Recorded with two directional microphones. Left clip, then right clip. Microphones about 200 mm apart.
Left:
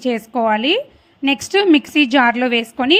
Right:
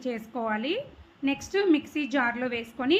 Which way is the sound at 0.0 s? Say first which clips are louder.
Left 14 dB; 40° left (ahead or behind).